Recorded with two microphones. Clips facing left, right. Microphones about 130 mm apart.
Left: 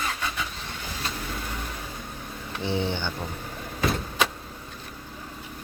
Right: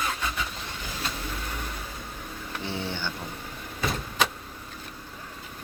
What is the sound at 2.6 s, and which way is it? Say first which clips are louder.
Speech: left 6 dB; 20° left (ahead or behind).